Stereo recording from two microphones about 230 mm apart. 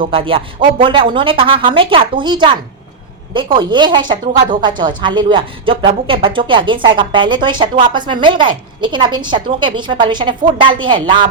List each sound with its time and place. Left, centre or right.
0.0 s a woman's voice: right